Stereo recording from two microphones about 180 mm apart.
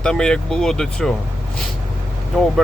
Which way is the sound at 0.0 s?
5° left (ahead or behind).